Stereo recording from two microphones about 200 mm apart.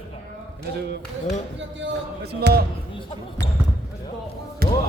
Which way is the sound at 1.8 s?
60° right (ahead or behind).